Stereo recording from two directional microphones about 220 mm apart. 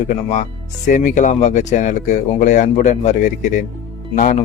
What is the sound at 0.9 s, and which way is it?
Speech, 35° left (ahead or behind).